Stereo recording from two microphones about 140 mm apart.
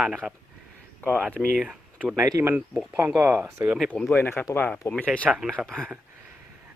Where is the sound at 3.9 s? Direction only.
10° left (ahead or behind).